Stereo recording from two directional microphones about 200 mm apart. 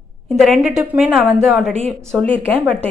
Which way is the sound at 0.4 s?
Centre (ahead or behind).